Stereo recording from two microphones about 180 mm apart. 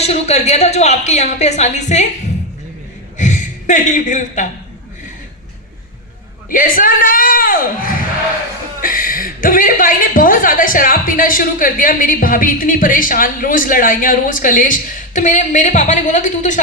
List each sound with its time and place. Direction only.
0.0 s a woman's voice: 35° left (ahead or behind)
3.2 s speech: 45° left (ahead or behind)
6.5 s a woman's voice: 50° left (ahead or behind)